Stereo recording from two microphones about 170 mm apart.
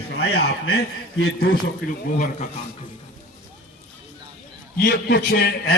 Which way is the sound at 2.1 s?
50° left (ahead or behind).